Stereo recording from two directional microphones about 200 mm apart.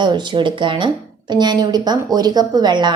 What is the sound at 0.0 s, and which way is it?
A woman's voice, 25° right (ahead or behind).